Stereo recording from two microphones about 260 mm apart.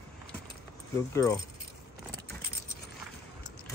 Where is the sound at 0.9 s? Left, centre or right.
Centre.